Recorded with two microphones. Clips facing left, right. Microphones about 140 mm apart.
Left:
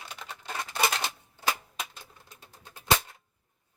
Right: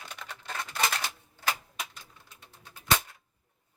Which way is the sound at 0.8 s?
15° left (ahead or behind).